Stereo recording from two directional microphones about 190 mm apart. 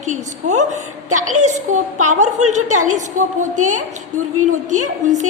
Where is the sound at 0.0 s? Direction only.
40° right (ahead or behind).